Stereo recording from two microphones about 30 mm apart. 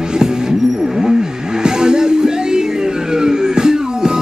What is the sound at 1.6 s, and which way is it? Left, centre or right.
Music, right.